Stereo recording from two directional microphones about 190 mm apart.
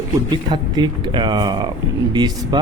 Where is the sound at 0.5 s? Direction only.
25° right (ahead or behind).